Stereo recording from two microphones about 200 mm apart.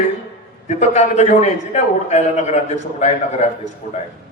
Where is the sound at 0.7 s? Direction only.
35° left (ahead or behind).